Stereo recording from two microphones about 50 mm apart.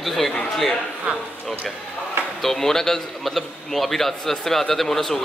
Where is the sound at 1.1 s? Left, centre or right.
Right.